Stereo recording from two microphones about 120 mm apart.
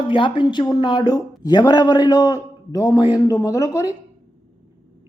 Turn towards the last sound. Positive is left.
turn(degrees=30)  # may be behind; listen again after turning